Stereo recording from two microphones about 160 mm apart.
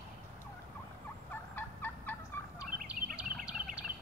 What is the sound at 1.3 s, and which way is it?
Fowl, 10° left (ahead or behind).